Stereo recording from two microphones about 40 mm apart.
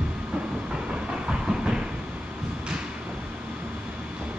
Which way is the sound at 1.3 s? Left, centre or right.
Right.